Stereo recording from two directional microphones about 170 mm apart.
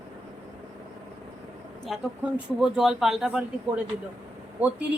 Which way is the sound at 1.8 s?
5° right (ahead or behind).